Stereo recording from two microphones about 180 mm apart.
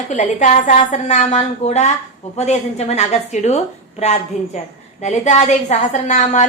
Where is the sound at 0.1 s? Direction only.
40° left (ahead or behind).